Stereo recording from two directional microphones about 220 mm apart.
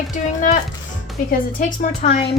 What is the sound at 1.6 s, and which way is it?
Speech, 35° left (ahead or behind).